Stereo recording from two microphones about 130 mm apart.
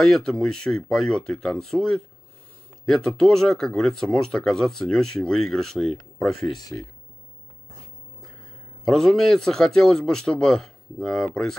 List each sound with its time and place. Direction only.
0.0 s speech: 5° left (ahead or behind)
6.6 s speech: 25° left (ahead or behind)
8.8 s speech: 5° left (ahead or behind)